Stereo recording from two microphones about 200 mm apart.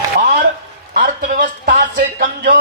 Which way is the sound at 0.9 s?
40° right (ahead or behind).